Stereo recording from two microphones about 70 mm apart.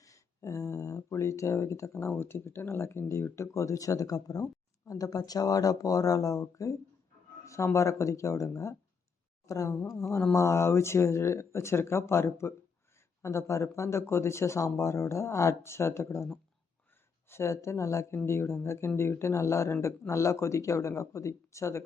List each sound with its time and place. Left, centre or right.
0.0 s a sound: left
2.0 s speech: left
10.3 s speech: left